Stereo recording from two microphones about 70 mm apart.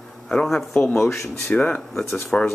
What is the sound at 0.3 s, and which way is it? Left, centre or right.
Speech, centre.